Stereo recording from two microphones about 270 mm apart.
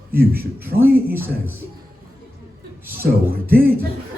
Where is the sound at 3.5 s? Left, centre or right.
Right.